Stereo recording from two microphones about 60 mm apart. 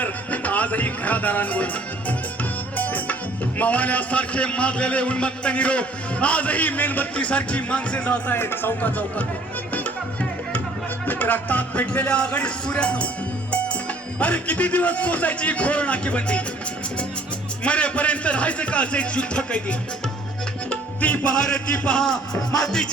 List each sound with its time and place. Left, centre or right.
0.0 s music: left
3.6 s a man's voice: left
8.3 s speech: left
11.0 s a man's voice: left
14.2 s a man's voice: left
17.6 s a man's voice: centre
20.7 s music: left